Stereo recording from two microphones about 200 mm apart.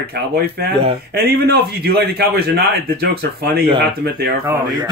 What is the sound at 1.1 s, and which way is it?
Speech, 50° right (ahead or behind).